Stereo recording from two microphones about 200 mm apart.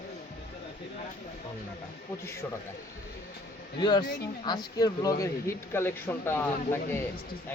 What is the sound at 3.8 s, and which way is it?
Speech, 20° left (ahead or behind).